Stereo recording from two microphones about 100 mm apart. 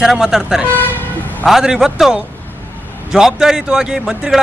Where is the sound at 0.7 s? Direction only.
20° left (ahead or behind).